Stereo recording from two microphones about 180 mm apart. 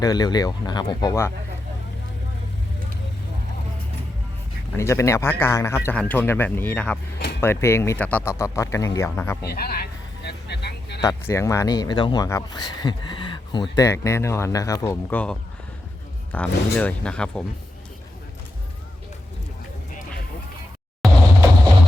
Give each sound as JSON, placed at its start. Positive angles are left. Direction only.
{"t": 0.0, "sound": "speech", "side_deg": 20}
{"t": 4.8, "sound": "a man's voice", "side_deg": 15}
{"t": 9.4, "sound": "speech", "side_deg": 60}
{"t": 10.2, "sound": "a sound", "side_deg": 70}
{"t": 11.0, "sound": "a man's voice", "side_deg": 15}
{"t": 21.0, "sound": "a sound", "side_deg": 0}